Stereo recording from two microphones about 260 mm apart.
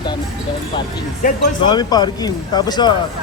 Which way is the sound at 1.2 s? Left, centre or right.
Left.